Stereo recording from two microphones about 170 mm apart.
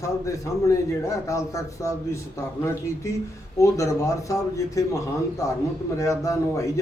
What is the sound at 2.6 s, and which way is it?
A man's voice, 15° left (ahead or behind).